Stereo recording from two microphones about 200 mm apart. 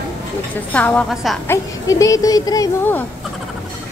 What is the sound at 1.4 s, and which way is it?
Speech, 15° left (ahead or behind).